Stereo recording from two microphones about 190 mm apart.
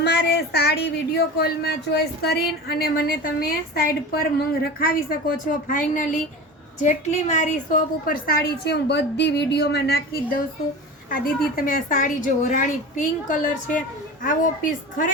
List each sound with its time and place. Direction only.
0.0 s a woman's voice: 60° left (ahead or behind)